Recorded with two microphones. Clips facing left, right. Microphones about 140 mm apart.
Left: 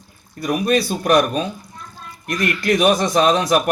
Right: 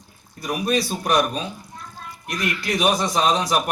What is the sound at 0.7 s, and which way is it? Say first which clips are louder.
A man's voice: left 5 dB; 60° left (ahead or behind).